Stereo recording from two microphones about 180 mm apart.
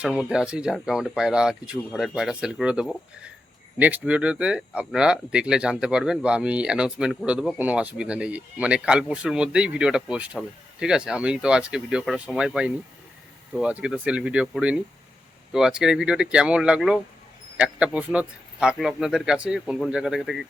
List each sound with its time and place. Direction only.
0.0 s speech: 5° right (ahead or behind)